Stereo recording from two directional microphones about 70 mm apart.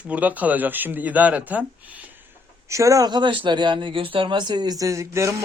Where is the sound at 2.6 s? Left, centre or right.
Right.